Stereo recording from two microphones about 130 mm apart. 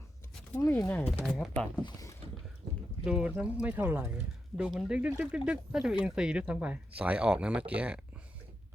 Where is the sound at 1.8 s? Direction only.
25° left (ahead or behind).